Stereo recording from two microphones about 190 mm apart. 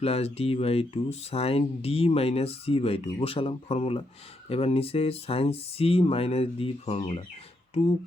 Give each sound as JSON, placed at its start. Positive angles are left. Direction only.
{"t": 0.0, "sound": "speech", "side_deg": 30}